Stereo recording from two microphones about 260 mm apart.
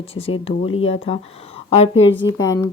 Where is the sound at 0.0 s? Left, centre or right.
Left.